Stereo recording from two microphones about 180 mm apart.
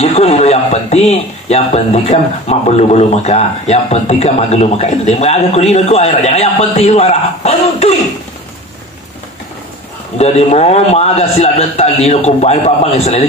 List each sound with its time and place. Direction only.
0.0 s speech: 35° left (ahead or behind)
10.1 s speech: 35° left (ahead or behind)